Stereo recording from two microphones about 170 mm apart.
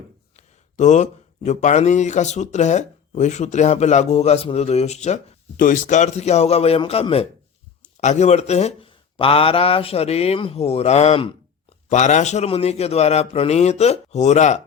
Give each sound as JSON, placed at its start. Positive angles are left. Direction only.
{"t": 0.3, "sound": "speech", "side_deg": 45}